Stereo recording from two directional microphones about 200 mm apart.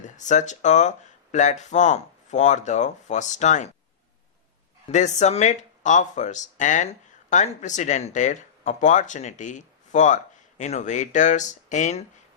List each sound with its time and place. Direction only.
0.0 s speech: 35° left (ahead or behind)
4.9 s speech: 35° left (ahead or behind)